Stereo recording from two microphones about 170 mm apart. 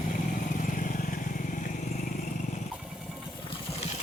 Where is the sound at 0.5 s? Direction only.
50° left (ahead or behind).